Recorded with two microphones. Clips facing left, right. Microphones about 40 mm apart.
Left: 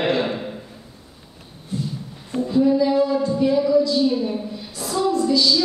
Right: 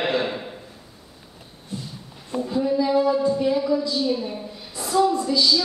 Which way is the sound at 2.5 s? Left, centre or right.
Centre.